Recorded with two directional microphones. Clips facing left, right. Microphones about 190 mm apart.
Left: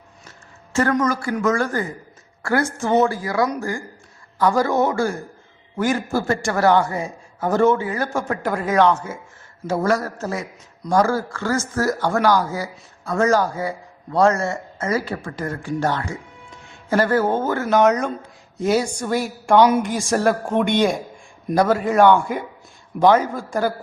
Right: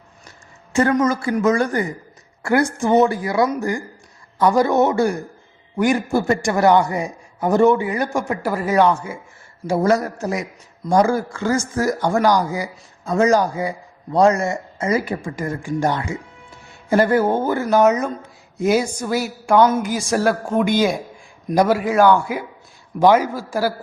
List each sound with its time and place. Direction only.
0.3 s a man's voice: 15° right (ahead or behind)